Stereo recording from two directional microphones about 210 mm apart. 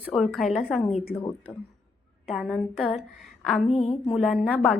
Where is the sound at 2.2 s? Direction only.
Centre (ahead or behind).